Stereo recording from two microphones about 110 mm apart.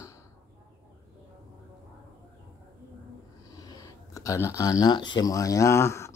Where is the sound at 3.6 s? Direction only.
30° left (ahead or behind).